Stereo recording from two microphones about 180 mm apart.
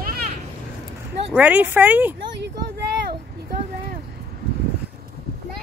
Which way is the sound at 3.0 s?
60° right (ahead or behind).